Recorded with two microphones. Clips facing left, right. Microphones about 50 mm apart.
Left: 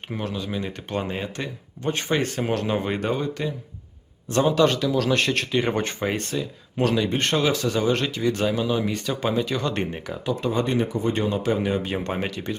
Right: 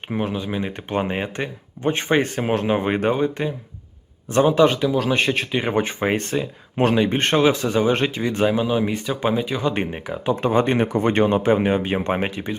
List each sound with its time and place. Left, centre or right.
0.1 s speech: right
6.1 s speech: right
10.4 s speech: right